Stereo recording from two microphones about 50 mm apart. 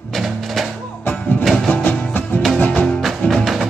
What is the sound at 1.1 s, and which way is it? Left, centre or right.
Music, left.